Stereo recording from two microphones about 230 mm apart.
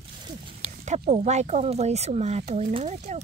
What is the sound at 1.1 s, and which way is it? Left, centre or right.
Speech, right.